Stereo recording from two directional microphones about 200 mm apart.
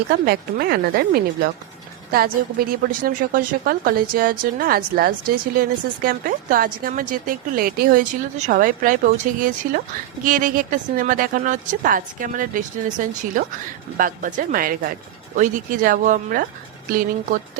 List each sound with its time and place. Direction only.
0.1 s a woman's voice: 50° right (ahead or behind)